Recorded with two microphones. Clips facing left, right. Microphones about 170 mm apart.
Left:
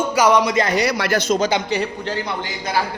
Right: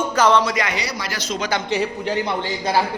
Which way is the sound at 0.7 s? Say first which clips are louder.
Left 9 dB; 55° left (ahead or behind).